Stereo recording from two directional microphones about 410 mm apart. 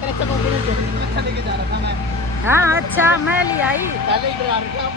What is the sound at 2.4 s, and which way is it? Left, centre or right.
Speech, centre.